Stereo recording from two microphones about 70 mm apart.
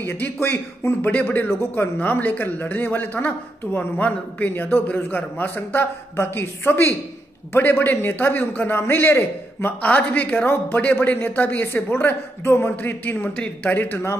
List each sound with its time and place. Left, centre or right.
0.0 s a man's voice: left